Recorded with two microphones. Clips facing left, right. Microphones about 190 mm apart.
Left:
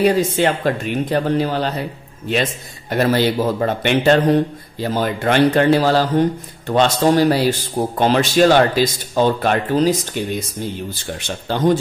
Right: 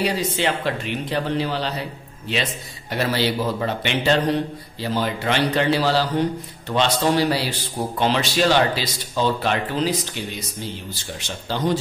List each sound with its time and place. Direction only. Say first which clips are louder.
0.0 s a man's voice: left 7 dB; 50° left (ahead or behind)
2.9 s a man's voice: left 6 dB; 50° left (ahead or behind)